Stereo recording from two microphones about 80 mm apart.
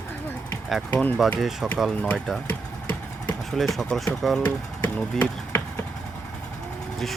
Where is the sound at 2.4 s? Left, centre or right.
Left.